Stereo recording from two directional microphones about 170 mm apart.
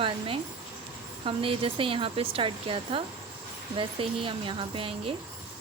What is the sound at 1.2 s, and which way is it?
Speech, 30° right (ahead or behind).